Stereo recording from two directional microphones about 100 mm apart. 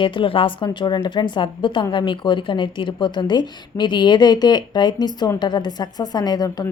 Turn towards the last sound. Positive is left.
turn(degrees=40)  # may be behind; listen again after turning